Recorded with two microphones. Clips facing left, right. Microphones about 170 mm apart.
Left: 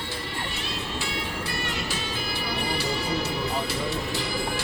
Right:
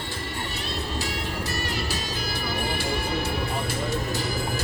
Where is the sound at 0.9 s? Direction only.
40° right (ahead or behind).